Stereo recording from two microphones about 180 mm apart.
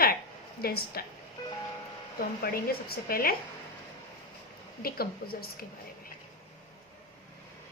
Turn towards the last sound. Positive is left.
turn(degrees=55)  # may be behind; listen again after turning